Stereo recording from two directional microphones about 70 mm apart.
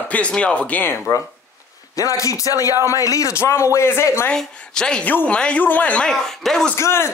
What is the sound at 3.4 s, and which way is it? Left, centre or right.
Speech, left.